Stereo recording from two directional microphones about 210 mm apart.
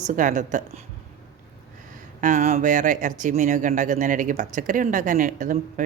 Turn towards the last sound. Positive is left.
turn(degrees=-40)  # may be behind; listen again after turning